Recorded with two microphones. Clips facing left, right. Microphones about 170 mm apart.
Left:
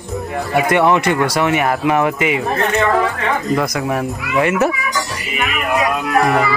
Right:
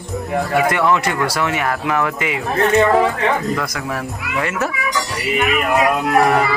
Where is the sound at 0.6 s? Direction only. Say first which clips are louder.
Left 3 dB; 20° left (ahead or behind).